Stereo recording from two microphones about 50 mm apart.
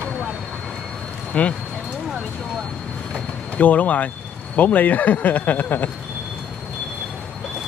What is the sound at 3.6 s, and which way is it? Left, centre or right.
Speech, left.